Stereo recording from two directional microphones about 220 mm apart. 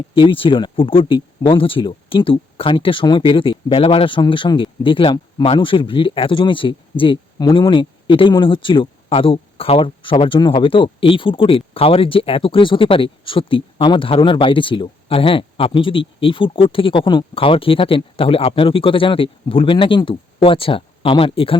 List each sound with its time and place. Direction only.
0.1 s speech: 25° left (ahead or behind)